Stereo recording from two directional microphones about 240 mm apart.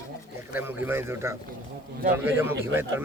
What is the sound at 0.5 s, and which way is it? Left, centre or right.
Speech, centre.